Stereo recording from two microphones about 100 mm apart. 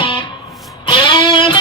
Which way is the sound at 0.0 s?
55° left (ahead or behind).